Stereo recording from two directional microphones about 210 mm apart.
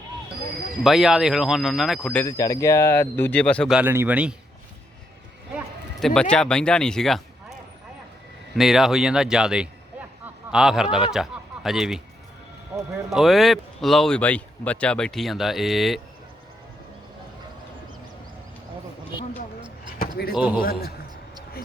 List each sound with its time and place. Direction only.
0.9 s speech: centre (ahead or behind)
2.2 s speech: 15° left (ahead or behind); by 4.4 s 5° right (ahead or behind)
5.5 s a sound: centre (ahead or behind)
6.3 s speech: 5° left (ahead or behind)
8.5 s speech: centre (ahead or behind)
13.1 s speech: centre (ahead or behind)
20.0 s a sound: 45° left (ahead or behind)
20.3 s a man's voice: 5° right (ahead or behind)
20.6 s a man's voice: 45° left (ahead or behind)